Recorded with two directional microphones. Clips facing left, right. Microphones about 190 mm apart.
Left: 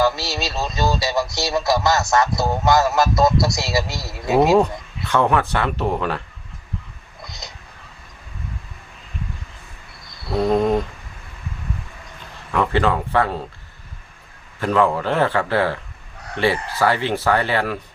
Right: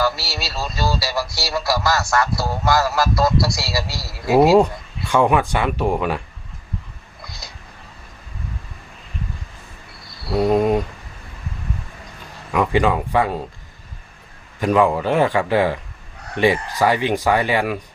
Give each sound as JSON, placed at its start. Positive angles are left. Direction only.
{"t": 0.0, "sound": "speech", "side_deg": 20}
{"t": 4.5, "sound": "speech", "side_deg": -10}
{"t": 7.3, "sound": "a sound", "side_deg": 20}
{"t": 10.3, "sound": "speech", "side_deg": -10}
{"t": 12.5, "sound": "speech", "side_deg": -15}
{"t": 14.6, "sound": "speech", "side_deg": -15}